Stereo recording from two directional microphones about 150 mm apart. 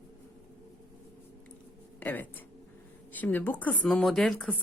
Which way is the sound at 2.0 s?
10° left (ahead or behind).